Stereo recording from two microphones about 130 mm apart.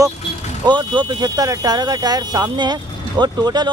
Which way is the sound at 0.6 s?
35° right (ahead or behind).